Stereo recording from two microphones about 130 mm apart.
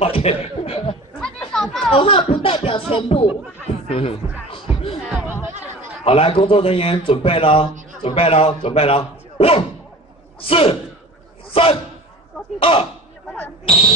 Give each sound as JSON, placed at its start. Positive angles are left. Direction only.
{"t": 0.0, "sound": "speech", "side_deg": 50}
{"t": 1.2, "sound": "children playing", "side_deg": 5}
{"t": 1.9, "sound": "music", "side_deg": 45}
{"t": 5.2, "sound": "a sound", "side_deg": -15}
{"t": 6.0, "sound": "speech", "side_deg": 50}